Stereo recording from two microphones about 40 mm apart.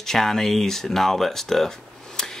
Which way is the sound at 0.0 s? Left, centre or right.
Centre.